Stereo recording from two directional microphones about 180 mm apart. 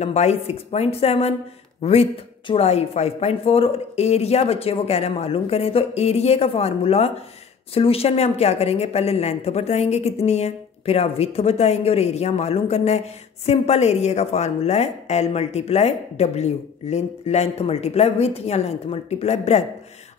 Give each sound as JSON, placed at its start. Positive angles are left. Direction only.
{"t": 0.0, "sound": "speech", "side_deg": 40}